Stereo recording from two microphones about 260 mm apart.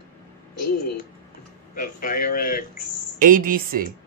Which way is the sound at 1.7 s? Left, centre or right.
Left.